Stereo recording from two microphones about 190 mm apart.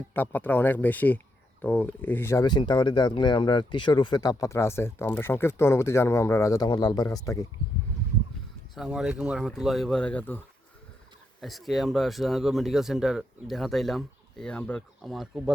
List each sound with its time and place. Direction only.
0.1 s speech: 10° left (ahead or behind)
8.7 s speech: centre (ahead or behind)